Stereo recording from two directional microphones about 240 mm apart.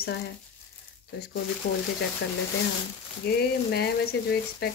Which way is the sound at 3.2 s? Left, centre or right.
Left.